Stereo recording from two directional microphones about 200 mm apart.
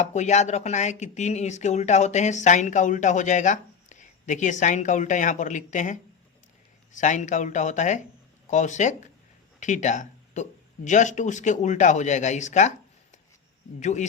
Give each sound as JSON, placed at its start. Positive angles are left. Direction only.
{"t": 0.0, "sound": "speech", "side_deg": 35}